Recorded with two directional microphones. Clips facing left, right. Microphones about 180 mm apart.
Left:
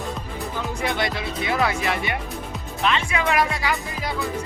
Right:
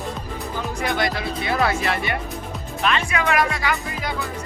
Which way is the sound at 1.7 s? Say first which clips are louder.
Right 1 dB; 15° left (ahead or behind).